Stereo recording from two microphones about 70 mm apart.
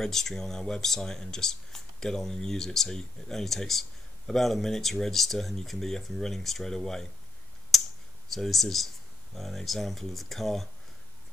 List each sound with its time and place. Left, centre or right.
0.0 s speech: centre
8.3 s speech: centre